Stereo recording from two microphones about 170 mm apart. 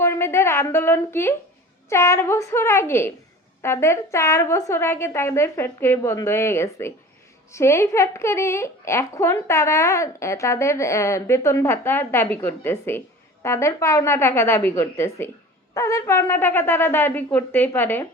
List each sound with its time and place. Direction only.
0.0 s a woman's voice: 15° left (ahead or behind)